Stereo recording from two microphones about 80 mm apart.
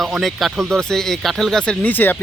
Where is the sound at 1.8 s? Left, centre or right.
Left.